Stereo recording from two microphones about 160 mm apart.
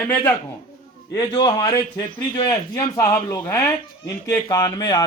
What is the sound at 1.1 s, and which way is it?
A man's voice, 25° left (ahead or behind).